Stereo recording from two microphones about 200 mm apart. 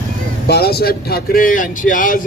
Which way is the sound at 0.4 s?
50° left (ahead or behind).